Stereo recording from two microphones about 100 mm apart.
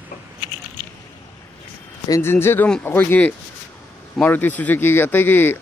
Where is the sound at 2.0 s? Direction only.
35° left (ahead or behind).